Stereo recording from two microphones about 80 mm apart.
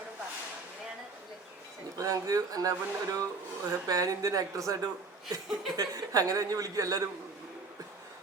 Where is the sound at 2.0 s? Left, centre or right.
Right.